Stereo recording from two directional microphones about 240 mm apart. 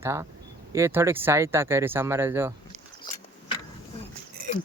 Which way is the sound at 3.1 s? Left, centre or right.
Centre.